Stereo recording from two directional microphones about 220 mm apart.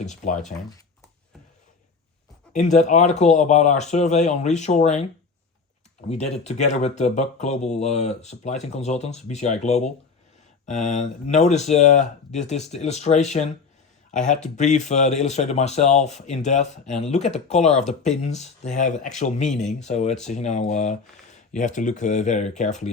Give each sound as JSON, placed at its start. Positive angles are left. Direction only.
{"t": 0.0, "sound": "speech", "side_deg": 35}
{"t": 2.5, "sound": "speech", "side_deg": 35}
{"t": 6.1, "sound": "speech", "side_deg": 30}